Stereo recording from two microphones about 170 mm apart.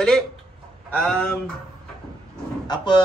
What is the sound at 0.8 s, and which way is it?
Speech, 5° left (ahead or behind).